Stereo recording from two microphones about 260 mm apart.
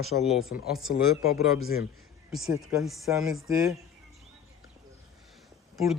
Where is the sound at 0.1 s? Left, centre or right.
Left.